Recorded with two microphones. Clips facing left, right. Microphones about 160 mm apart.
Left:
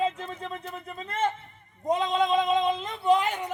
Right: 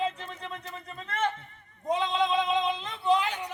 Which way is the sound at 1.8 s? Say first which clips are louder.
Left 2 dB; 45° left (ahead or behind).